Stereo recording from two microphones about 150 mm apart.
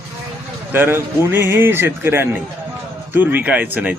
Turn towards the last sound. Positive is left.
turn(degrees=-10)  # may be behind; listen again after turning